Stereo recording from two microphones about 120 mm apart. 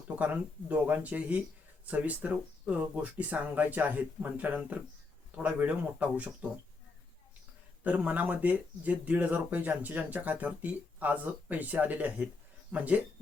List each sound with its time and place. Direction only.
0.7 s speech: 10° right (ahead or behind)
7.9 s speech: 10° right (ahead or behind)